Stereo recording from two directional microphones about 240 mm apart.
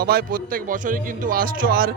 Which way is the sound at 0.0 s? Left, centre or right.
Right.